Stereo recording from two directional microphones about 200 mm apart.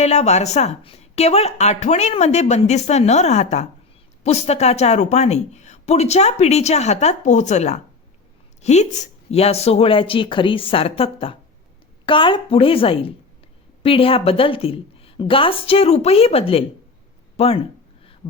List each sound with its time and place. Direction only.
0.0 s a woman's voice: 35° left (ahead or behind)